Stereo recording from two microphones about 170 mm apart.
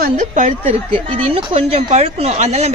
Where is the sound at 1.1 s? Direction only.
35° right (ahead or behind).